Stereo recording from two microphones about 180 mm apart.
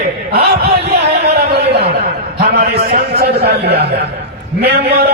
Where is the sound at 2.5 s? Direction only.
60° right (ahead or behind).